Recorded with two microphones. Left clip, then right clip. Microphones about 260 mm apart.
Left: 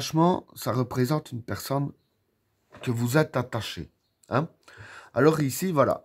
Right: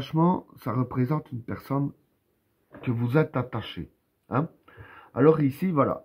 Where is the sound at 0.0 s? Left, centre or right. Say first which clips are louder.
Left 2 dB; left.